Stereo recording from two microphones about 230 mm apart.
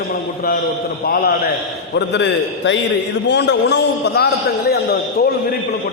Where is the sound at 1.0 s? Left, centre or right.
Left.